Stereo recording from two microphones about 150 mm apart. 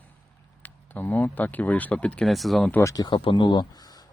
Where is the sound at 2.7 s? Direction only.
15° left (ahead or behind).